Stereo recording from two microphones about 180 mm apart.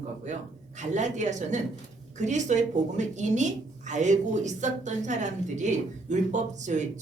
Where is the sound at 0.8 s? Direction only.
40° right (ahead or behind).